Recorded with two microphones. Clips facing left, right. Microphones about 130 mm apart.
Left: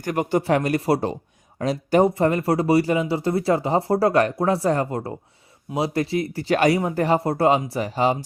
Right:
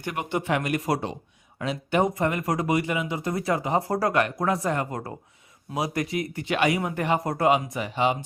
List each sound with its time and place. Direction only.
0.0 s speech: 40° left (ahead or behind)